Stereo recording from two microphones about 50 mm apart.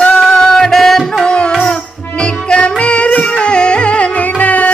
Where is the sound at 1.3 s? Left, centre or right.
Left.